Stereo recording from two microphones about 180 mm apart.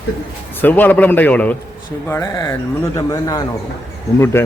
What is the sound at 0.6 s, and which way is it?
A man's voice, 10° left (ahead or behind).